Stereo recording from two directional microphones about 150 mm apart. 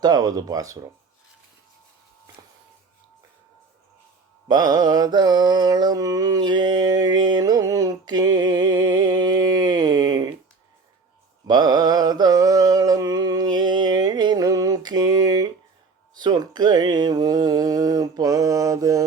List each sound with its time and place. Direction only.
0.0 s speech: 25° right (ahead or behind)
4.4 s mantra: 25° right (ahead or behind)
11.4 s mantra: 25° right (ahead or behind)
16.1 s speech: 25° right (ahead or behind)